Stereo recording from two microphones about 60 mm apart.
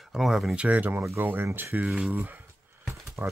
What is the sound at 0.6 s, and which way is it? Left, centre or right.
Speech, right.